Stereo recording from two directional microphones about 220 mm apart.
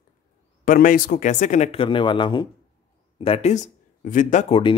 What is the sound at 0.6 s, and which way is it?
Speech, 40° left (ahead or behind).